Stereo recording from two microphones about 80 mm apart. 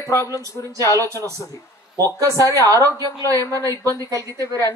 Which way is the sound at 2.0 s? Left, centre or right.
Right.